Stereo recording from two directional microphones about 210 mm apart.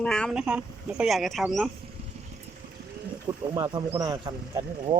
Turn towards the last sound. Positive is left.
turn(degrees=-20)  # may be behind; listen again after turning